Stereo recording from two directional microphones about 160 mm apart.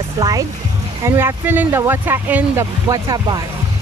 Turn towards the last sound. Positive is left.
turn(degrees=-25)  # may be behind; listen again after turning